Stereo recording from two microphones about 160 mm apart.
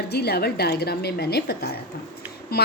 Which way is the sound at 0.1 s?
85° left.